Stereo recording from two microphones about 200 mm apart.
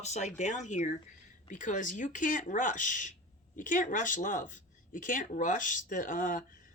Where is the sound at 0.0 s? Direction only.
35° left (ahead or behind).